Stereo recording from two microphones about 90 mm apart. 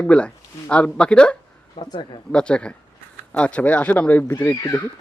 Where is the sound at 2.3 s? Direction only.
10° left (ahead or behind).